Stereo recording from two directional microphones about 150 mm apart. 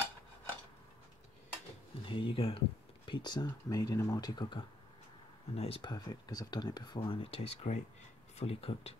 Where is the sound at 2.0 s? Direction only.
35° left (ahead or behind).